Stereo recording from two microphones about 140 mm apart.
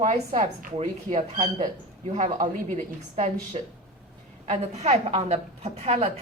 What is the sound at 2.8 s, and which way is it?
Speech, 60° right (ahead or behind).